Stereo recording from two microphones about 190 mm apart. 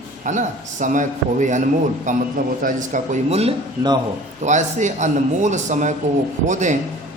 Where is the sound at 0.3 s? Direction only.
40° right (ahead or behind).